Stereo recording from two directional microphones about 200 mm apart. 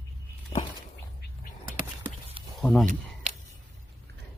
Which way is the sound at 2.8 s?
40° right (ahead or behind).